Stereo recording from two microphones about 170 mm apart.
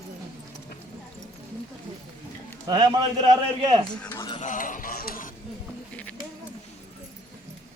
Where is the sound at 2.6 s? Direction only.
25° right (ahead or behind).